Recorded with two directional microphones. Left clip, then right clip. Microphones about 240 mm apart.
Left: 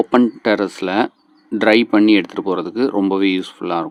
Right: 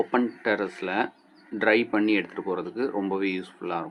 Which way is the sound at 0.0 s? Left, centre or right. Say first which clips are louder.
Left 10 dB; left.